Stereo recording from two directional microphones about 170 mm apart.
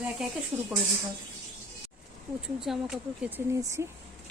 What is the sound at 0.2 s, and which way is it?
Speech, 5° right (ahead or behind).